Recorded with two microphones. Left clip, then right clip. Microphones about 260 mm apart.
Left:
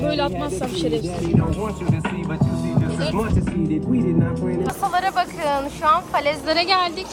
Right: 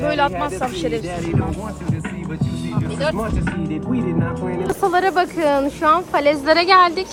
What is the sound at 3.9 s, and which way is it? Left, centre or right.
Music, centre.